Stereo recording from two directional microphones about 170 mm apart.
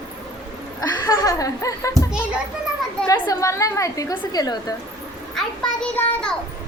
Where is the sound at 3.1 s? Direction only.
20° left (ahead or behind).